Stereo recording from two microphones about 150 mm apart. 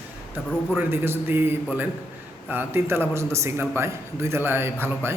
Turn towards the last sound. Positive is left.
turn(degrees=-15)  # may be behind; listen again after turning